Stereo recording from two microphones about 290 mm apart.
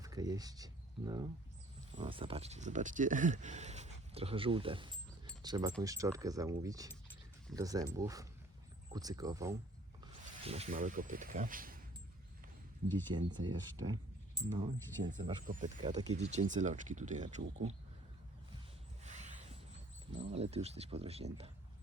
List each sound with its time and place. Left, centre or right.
0.0 s speech: centre
10.4 s speech: right
13.1 s speech: centre
19.0 s a sound: right
20.1 s speech: right